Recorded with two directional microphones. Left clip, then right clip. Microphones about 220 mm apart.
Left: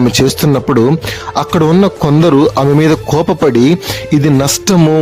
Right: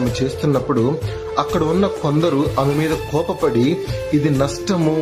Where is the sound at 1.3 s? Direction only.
50° left (ahead or behind).